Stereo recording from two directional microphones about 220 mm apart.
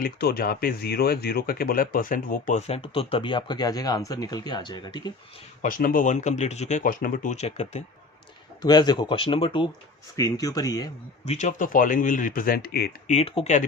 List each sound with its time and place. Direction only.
0.0 s speech: 45° left (ahead or behind); by 5.1 s 20° left (ahead or behind)
5.6 s speech: 40° left (ahead or behind); by 10.8 s 15° left (ahead or behind)
11.3 s speech: 30° left (ahead or behind)
13.1 s speech: 25° left (ahead or behind)